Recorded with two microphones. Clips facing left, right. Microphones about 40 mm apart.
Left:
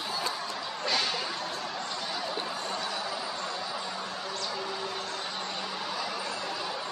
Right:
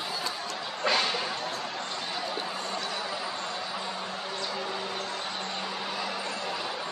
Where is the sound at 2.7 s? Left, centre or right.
Centre.